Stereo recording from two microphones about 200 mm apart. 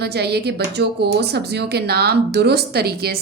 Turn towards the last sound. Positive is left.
turn(degrees=-50)  # may be behind; listen again after turning